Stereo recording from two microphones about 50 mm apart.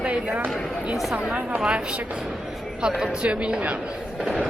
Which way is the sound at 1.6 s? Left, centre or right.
Right.